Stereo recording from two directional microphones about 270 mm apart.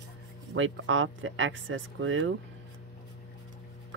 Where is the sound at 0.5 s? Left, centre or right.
Right.